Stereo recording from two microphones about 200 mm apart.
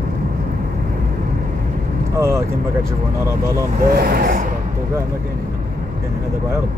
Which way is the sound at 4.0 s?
50° right (ahead or behind).